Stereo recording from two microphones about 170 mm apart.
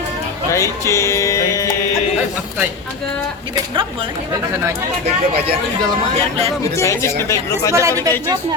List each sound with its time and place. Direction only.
0.5 s music: 15° left (ahead or behind)
6.7 s speech: 15° left (ahead or behind)
7.7 s speech: 15° right (ahead or behind)